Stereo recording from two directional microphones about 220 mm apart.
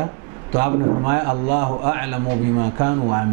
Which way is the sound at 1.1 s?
15° right (ahead or behind).